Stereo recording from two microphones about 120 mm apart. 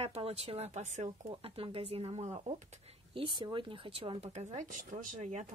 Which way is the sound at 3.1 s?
40° right (ahead or behind).